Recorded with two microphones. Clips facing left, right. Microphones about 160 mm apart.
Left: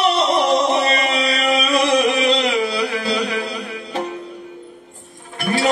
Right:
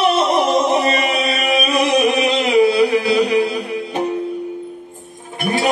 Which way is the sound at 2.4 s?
20° right (ahead or behind).